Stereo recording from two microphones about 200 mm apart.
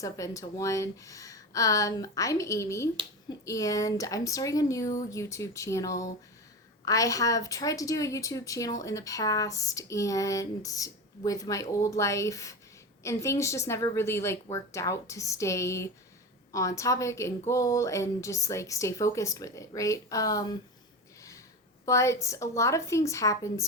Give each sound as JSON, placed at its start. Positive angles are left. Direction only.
{"t": 0.0, "sound": "a woman's voice", "side_deg": 15}
{"t": 21.8, "sound": "a woman's voice", "side_deg": 15}